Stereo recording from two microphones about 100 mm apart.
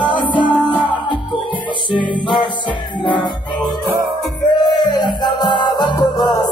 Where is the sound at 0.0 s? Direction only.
55° left (ahead or behind).